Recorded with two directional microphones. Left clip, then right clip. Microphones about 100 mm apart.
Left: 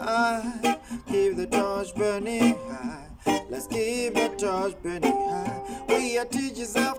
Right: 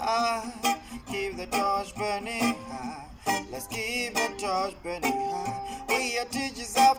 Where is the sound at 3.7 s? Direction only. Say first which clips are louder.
Left 4 dB; 50° left (ahead or behind).